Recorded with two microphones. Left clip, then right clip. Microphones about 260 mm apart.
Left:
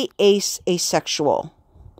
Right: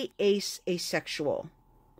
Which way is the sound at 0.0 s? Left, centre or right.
Left.